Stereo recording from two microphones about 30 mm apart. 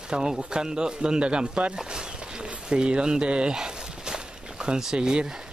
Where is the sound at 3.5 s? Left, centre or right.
Right.